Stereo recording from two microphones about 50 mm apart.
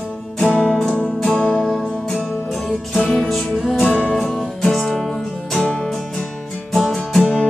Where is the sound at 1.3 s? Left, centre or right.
Left.